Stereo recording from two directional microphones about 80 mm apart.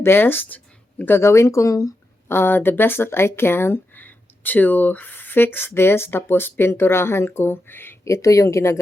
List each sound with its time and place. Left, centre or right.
0.0 s speech: left
2.2 s speech: left
8.0 s speech: left